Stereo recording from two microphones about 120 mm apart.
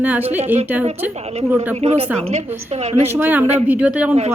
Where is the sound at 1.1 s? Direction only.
60° right (ahead or behind).